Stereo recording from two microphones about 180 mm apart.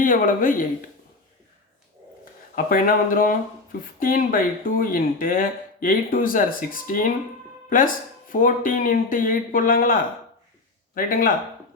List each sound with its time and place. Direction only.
0.0 s speech: 50° left (ahead or behind)
2.6 s speech: 50° left (ahead or behind)
8.3 s speech: 50° left (ahead or behind)